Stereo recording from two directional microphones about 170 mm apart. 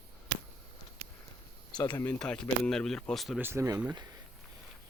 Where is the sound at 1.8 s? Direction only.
20° left (ahead or behind).